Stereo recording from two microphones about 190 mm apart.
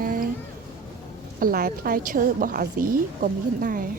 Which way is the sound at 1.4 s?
50° right (ahead or behind).